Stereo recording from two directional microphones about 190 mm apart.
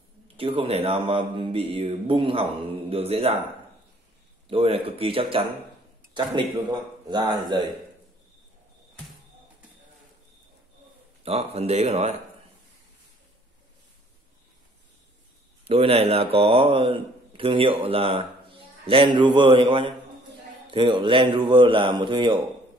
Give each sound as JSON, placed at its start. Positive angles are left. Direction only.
{"t": 0.4, "sound": "speech", "side_deg": -30}
{"t": 4.5, "sound": "speech", "side_deg": -30}
{"t": 11.2, "sound": "speech", "side_deg": -30}
{"t": 15.6, "sound": "speech", "side_deg": -30}